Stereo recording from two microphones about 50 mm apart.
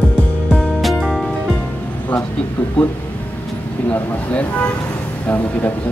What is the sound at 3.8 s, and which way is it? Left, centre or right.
Speech, left.